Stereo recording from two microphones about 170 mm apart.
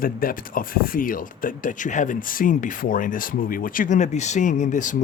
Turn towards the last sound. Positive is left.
turn(degrees=50)  # may be behind; listen again after turning